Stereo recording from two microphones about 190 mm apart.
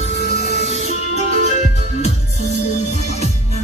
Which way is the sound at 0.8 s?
35° left (ahead or behind).